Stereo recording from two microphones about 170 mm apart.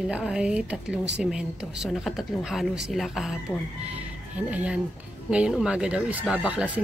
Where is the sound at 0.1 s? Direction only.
5° right (ahead or behind).